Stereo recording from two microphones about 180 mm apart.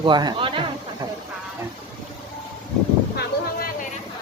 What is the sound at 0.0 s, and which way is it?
Speech, 25° right (ahead or behind).